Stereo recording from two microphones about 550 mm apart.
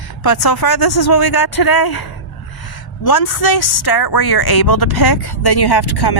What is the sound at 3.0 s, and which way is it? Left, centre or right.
A woman's voice, left.